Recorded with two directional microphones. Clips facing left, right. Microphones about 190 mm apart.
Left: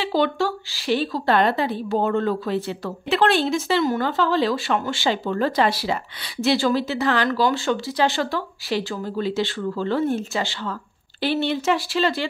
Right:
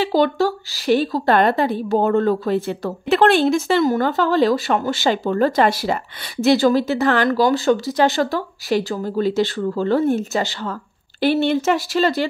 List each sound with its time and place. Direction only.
0.0 s a woman's voice: 40° right (ahead or behind)